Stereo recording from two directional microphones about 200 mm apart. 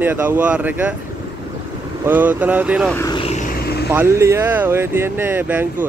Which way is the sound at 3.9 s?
10° right (ahead or behind).